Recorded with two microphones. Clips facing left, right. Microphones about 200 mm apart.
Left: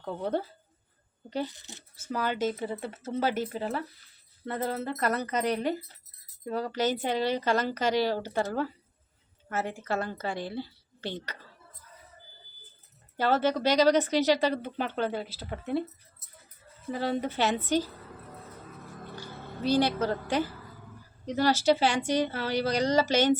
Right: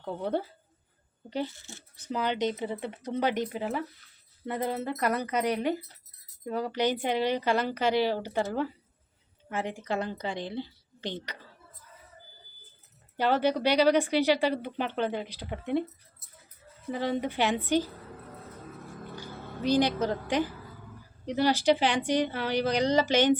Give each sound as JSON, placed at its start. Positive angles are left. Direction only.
{"t": 0.0, "sound": "speech", "side_deg": -10}
{"t": 1.5, "sound": "speech", "side_deg": 15}
{"t": 2.0, "sound": "speech", "side_deg": -20}
{"t": 2.6, "sound": "speech", "side_deg": 0}
{"t": 2.8, "sound": "speech", "side_deg": -15}
{"t": 13.1, "sound": "speech", "side_deg": -15}
{"t": 16.9, "sound": "speech", "side_deg": -15}
{"t": 19.1, "sound": "music", "side_deg": -15}
{"t": 21.2, "sound": "speech", "side_deg": -15}